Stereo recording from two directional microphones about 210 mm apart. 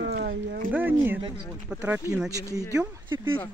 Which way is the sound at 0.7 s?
10° right (ahead or behind).